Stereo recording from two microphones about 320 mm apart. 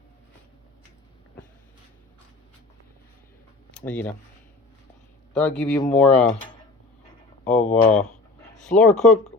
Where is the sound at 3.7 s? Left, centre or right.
Centre.